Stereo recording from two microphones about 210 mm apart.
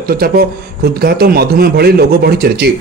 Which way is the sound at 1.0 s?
45° right (ahead or behind).